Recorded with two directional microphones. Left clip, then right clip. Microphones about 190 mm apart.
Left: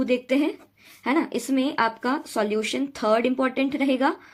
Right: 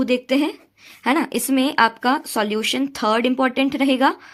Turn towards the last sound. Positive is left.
turn(degrees=-35)  # may be behind; listen again after turning